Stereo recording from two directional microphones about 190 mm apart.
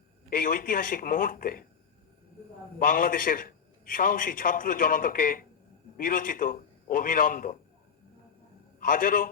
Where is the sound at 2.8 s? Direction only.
50° left (ahead or behind).